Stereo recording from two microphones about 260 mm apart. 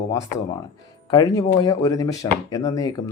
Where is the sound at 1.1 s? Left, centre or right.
Centre.